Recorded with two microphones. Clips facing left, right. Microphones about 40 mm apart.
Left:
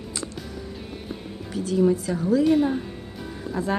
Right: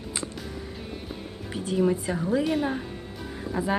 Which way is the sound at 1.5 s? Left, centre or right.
Right.